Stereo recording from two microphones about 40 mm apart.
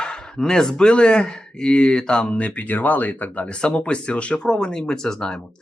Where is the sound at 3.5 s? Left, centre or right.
Left.